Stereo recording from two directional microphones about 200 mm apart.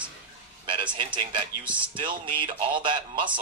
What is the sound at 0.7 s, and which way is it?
A man's voice, 25° right (ahead or behind).